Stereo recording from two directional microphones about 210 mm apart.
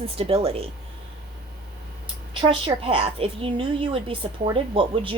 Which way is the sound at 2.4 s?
25° right (ahead or behind).